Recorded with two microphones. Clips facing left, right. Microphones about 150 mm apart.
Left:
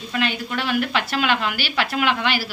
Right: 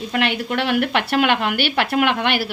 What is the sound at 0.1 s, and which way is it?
A woman's voice, 65° right (ahead or behind).